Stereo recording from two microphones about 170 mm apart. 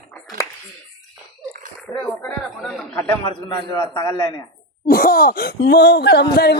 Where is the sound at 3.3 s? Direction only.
30° left (ahead or behind).